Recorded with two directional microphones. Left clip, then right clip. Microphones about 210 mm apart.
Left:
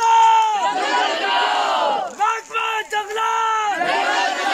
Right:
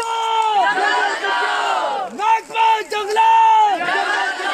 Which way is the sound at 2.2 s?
55° right (ahead or behind).